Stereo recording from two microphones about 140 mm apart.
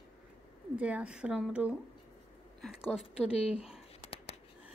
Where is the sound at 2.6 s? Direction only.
5° left (ahead or behind).